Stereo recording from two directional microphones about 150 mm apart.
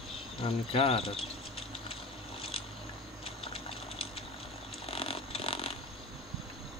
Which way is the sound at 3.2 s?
40° left (ahead or behind).